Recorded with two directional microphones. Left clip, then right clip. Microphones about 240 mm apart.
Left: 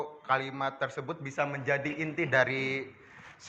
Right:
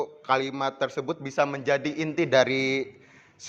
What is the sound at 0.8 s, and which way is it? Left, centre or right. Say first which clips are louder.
A man's voice: right 6 dB; right.